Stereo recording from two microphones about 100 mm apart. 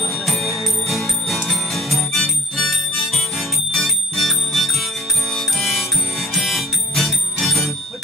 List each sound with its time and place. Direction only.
0.1 s music: centre (ahead or behind)